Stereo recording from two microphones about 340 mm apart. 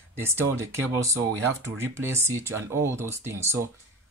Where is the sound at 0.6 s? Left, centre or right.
Centre.